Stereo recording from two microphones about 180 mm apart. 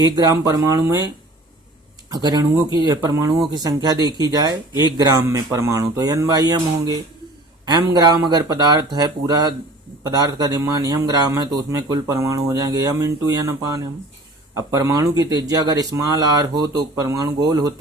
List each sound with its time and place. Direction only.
0.0 s speech: 20° right (ahead or behind)